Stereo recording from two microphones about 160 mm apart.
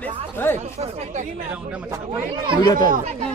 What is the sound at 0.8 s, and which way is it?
Speech, 45° right (ahead or behind).